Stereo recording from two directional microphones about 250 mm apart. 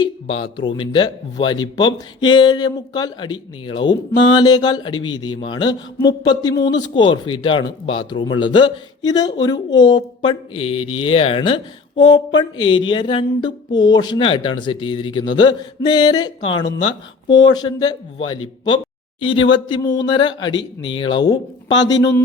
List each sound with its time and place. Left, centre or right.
0.0 s speech: left
19.2 s speech: centre